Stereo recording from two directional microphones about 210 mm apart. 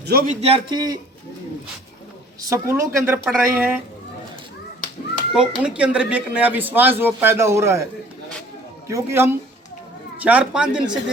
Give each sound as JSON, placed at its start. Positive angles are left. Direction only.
{"t": 0.0, "sound": "a man's voice", "side_deg": -45}
{"t": 0.4, "sound": "a man's voice", "side_deg": -25}
{"t": 2.4, "sound": "a woman's voice", "side_deg": -15}
{"t": 5.3, "sound": "a woman's voice", "side_deg": -5}
{"t": 8.9, "sound": "a woman's voice", "side_deg": -10}